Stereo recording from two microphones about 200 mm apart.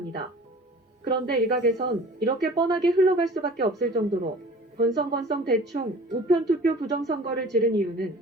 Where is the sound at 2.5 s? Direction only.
20° right (ahead or behind).